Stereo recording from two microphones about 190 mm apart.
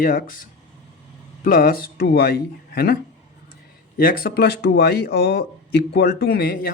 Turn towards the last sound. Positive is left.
turn(degrees=50)  # may be behind; listen again after turning